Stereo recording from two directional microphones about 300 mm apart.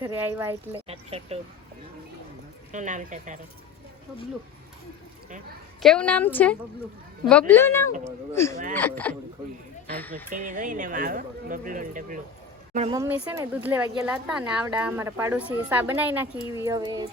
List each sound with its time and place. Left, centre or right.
0.0 s speech: centre
0.7 s speech: centre
2.7 s speech: right
5.8 s speech: centre
10.2 s speech: right
12.9 s speech: centre